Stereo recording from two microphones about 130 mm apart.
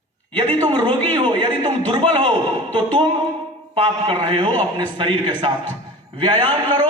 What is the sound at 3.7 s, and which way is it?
A man's voice, 45° right (ahead or behind).